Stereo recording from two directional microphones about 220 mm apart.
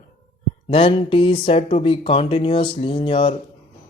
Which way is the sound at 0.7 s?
25° left (ahead or behind).